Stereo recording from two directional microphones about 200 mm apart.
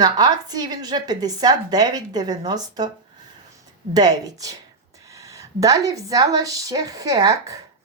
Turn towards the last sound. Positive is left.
turn(degrees=-15)  # may be behind; listen again after turning